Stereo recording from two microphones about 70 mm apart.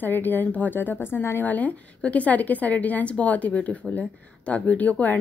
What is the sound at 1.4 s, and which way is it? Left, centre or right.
A woman's voice, left.